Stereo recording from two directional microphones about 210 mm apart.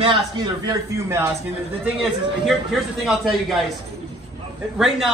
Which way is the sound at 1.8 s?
Centre (ahead or behind).